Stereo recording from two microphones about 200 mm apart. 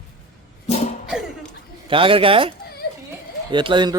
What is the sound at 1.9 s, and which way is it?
Speech, 25° right (ahead or behind).